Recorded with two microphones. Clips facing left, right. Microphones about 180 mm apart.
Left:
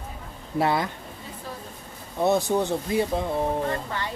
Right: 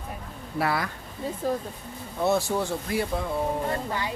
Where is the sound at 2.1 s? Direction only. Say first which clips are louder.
Left 3 dB; 20° left (ahead or behind).